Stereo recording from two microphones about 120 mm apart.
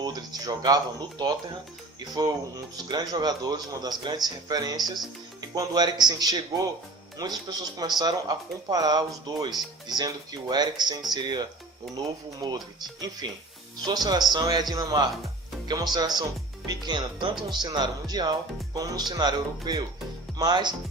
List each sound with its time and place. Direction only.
0.0 s speech: 35° right (ahead or behind)
2.0 s speech: 35° right (ahead or behind)